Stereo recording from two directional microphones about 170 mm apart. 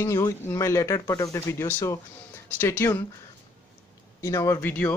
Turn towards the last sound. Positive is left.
turn(degrees=10)  # may be behind; listen again after turning